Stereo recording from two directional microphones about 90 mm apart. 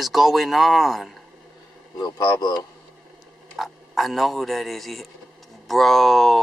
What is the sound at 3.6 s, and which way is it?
Speech, centre (ahead or behind).